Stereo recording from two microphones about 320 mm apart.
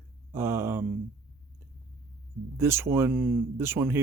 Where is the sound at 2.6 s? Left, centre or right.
Centre.